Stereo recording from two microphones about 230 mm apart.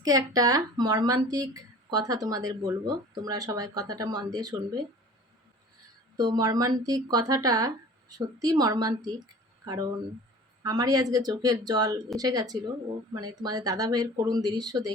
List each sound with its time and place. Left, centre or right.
0.0 s speech: centre
6.1 s speech: centre
10.6 s speech: centre